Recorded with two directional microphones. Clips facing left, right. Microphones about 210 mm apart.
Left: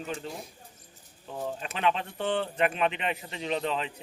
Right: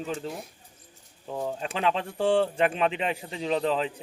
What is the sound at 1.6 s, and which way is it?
Speech, 35° right (ahead or behind).